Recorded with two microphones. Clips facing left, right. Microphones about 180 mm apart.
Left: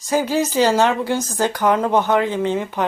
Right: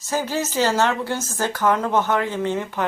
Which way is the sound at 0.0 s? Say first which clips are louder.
Left 5 dB; 15° left (ahead or behind).